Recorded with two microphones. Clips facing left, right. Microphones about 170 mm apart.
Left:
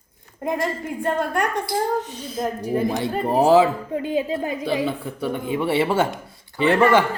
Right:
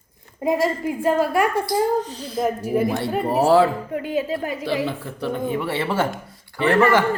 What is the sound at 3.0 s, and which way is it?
A woman's voice, 15° left (ahead or behind).